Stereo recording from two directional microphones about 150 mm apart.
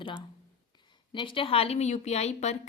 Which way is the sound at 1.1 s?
35° left (ahead or behind).